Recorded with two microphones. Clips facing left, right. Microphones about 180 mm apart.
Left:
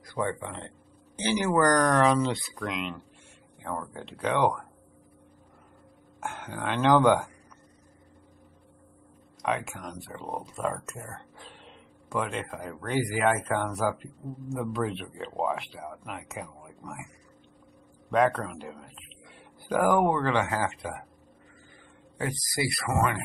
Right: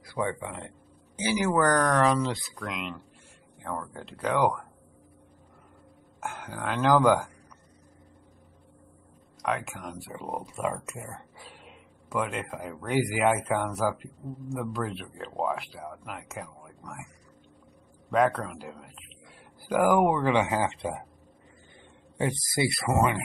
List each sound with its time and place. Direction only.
0.0 s speech: 10° right (ahead or behind)
6.2 s speech: centre (ahead or behind)
9.4 s speech: centre (ahead or behind)
18.1 s speech: centre (ahead or behind); by 21.0 s 25° right (ahead or behind)
22.2 s speech: 25° right (ahead or behind)